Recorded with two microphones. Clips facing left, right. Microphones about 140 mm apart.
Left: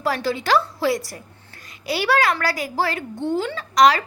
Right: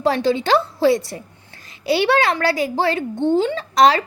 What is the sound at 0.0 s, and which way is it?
A woman's voice, 25° right (ahead or behind).